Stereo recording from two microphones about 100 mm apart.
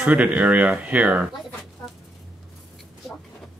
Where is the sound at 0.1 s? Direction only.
15° right (ahead or behind).